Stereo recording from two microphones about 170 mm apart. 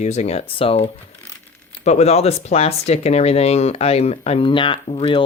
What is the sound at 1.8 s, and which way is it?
Speech, 40° left (ahead or behind).